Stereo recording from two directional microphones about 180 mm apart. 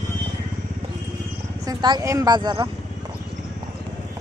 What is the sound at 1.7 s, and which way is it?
Speech, 20° right (ahead or behind).